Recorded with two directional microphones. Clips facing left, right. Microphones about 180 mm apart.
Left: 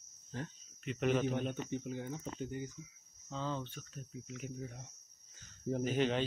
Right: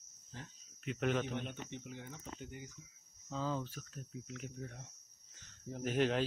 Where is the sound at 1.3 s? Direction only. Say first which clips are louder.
Left 6 dB; 40° left (ahead or behind).